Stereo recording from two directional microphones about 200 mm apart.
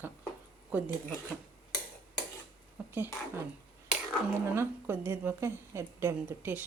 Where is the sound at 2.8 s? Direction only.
10° right (ahead or behind).